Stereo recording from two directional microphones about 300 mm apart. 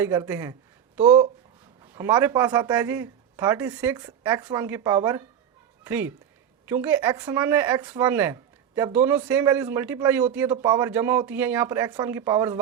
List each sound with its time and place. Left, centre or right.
0.0 s speech: centre
2.0 s speech: centre